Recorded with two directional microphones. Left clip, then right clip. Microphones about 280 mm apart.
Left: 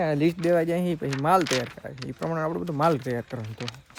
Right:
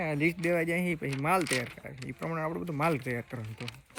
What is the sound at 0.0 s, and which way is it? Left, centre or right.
Speech, left.